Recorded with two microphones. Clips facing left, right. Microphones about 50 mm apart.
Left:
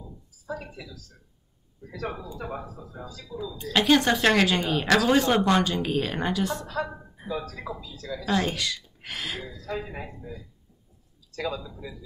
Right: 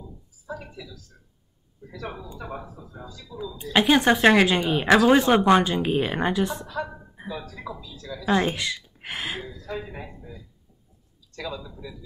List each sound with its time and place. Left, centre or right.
0.5 s speech: centre
2.3 s a man's voice: centre
2.6 s speech: centre
3.3 s a woman's voice: right
3.7 s speech: centre
7.2 s a sound: right
7.6 s speech: centre
8.3 s speech: centre
9.4 s speech: centre
9.8 s a man's voice: centre